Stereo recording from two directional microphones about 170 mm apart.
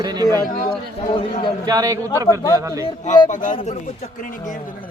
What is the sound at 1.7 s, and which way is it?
A man's voice, 20° right (ahead or behind).